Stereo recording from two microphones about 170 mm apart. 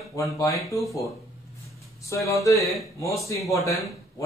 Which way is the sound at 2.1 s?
20° left (ahead or behind).